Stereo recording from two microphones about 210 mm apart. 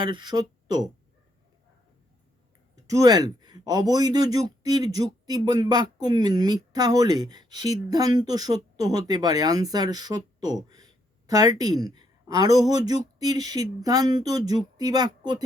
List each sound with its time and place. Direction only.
0.0 s speech: 20° right (ahead or behind)
2.8 s speech: 15° right (ahead or behind)